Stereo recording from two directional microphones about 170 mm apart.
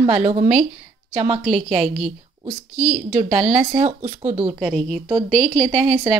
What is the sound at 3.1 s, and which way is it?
A woman's voice, 50° right (ahead or behind).